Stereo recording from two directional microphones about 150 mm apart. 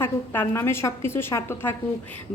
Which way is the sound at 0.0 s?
15° left (ahead or behind).